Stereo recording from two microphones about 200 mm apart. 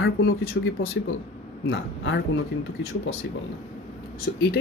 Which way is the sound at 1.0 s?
70° left (ahead or behind).